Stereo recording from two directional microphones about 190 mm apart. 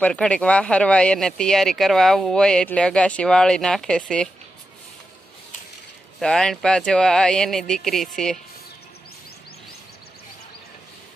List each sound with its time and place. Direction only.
0.0 s speech: 5° left (ahead or behind)
6.1 s speech: 5° left (ahead or behind)